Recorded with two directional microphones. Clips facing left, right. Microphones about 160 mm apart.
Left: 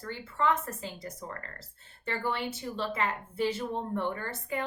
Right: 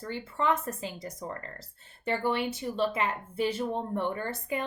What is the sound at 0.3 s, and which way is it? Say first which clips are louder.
A woman's voice: even; 15° right (ahead or behind).